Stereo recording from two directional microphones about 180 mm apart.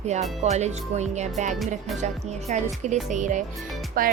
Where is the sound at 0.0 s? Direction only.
40° right (ahead or behind).